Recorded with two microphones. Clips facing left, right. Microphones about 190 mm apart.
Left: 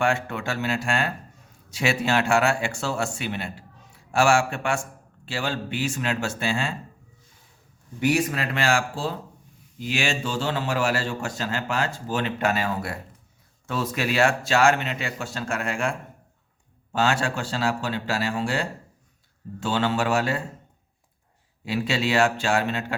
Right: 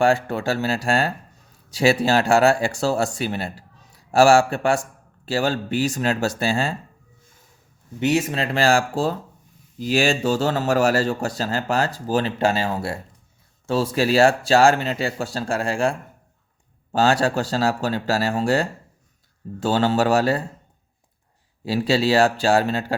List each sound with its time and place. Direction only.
0.0 s a man's voice: 35° right (ahead or behind)
7.9 s a man's voice: 25° right (ahead or behind)
21.6 s a man's voice: 35° right (ahead or behind)